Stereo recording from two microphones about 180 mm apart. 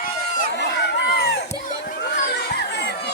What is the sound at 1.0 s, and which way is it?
Crowd, 65° left (ahead or behind).